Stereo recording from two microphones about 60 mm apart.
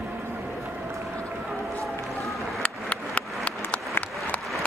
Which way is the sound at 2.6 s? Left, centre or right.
Centre.